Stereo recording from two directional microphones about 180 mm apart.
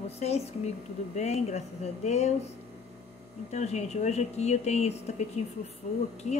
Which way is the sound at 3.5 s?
40° left (ahead or behind).